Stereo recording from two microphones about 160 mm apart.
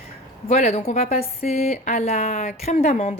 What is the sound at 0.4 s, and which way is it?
A woman's voice, 45° left (ahead or behind).